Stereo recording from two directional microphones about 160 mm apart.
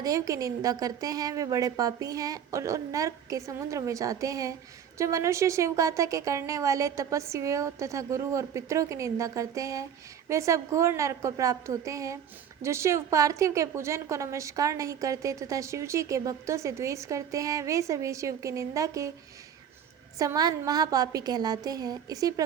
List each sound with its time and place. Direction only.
0.0 s a woman's voice: 20° right (ahead or behind)
20.1 s a woman's voice: 20° right (ahead or behind)